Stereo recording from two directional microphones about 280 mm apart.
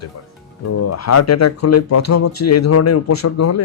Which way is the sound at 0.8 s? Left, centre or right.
Left.